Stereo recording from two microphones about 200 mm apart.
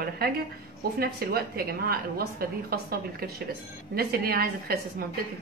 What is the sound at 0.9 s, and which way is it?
A woman's voice, 50° right (ahead or behind).